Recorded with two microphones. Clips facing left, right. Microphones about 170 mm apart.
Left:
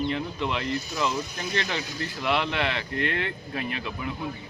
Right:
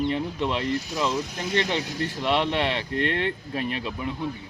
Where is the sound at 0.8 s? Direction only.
90° right.